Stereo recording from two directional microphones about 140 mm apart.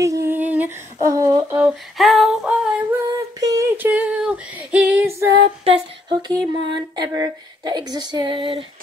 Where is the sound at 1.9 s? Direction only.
Centre (ahead or behind).